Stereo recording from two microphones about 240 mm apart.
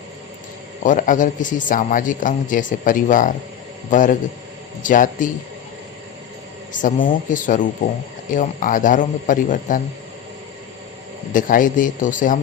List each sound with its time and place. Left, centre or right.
0.9 s a man's voice: left
6.8 s a man's voice: left
11.3 s a man's voice: left